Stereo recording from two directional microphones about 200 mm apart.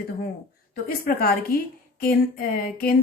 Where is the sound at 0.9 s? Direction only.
50° left (ahead or behind).